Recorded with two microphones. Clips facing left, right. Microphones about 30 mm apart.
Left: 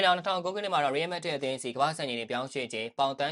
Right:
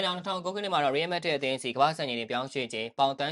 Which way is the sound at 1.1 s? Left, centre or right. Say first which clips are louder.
Right 3 dB; right.